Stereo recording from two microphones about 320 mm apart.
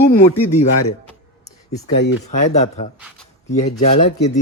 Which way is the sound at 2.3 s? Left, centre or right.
Left.